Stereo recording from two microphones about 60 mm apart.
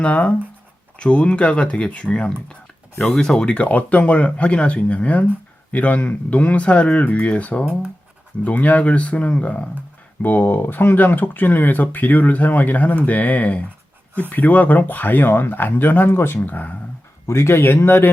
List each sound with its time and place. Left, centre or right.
0.0 s speech: left
17.2 s speech: left